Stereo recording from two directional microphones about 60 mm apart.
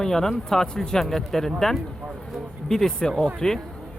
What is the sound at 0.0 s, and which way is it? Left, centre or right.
Speech, centre.